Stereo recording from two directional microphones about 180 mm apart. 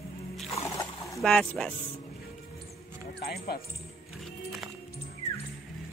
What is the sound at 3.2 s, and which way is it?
Speech, 60° left (ahead or behind).